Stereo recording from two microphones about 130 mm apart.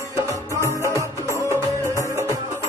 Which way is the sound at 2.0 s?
25° right (ahead or behind).